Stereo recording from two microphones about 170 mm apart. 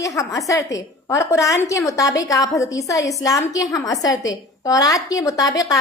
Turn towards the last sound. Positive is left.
turn(degrees=20)  # may be behind; listen again after turning